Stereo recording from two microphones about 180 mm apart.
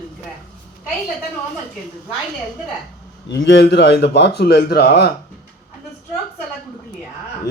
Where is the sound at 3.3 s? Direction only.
80° left.